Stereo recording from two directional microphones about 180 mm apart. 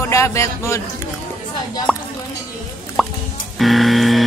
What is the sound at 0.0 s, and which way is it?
Speech, 15° left (ahead or behind).